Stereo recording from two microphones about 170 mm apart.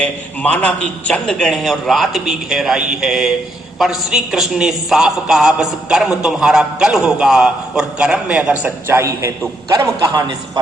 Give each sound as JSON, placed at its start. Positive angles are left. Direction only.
{"t": 0.0, "sound": "a man's voice", "side_deg": 10}